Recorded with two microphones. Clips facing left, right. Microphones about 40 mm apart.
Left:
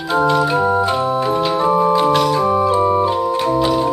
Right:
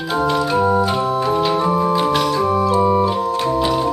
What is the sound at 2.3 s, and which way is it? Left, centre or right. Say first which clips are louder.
Organ: left 1 dB; centre.